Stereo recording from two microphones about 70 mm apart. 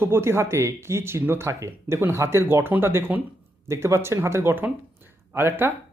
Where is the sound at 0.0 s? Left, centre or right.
Right.